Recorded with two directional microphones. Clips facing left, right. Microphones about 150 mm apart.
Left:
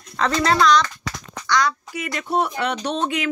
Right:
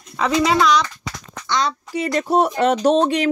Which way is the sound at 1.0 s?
25° right (ahead or behind).